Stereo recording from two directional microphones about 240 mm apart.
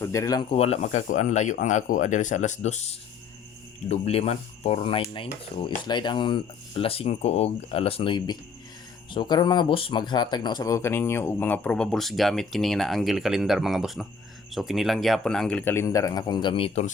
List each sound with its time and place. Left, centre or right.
0.0 s dishes: centre; by 2.8 s left
3.8 s dishes: left
9.0 s speech: centre